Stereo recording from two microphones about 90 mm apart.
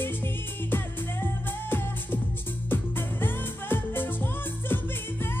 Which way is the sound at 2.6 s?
25° left (ahead or behind).